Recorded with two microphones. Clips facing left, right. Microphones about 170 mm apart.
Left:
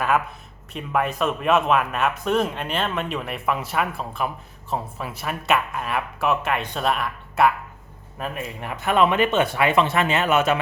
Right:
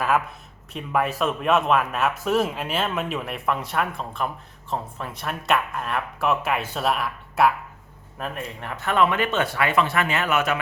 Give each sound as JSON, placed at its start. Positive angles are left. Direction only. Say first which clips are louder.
{"t": 0.0, "sound": "speech", "louder": "left 1 dB", "side_deg": 0}
{"t": 8.7, "sound": "speech", "louder": "left 2 dB", "side_deg": 15}